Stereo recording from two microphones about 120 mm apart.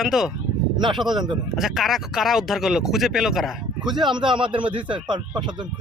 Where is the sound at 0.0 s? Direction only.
5° right (ahead or behind).